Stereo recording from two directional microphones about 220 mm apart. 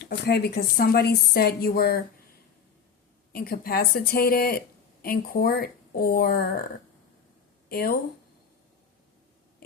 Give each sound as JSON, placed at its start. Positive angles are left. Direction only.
{"t": 0.1, "sound": "a woman's voice", "side_deg": 45}
{"t": 3.3, "sound": "a woman's voice", "side_deg": 45}
{"t": 7.7, "sound": "a woman's voice", "side_deg": 45}